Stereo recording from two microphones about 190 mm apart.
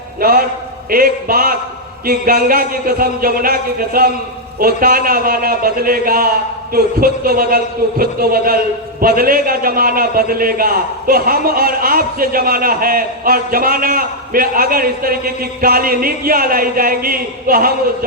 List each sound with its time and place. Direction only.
0.2 s speech: 50° right (ahead or behind)